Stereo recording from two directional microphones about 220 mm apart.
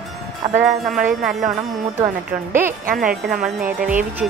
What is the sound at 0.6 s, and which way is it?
Speech, centre (ahead or behind).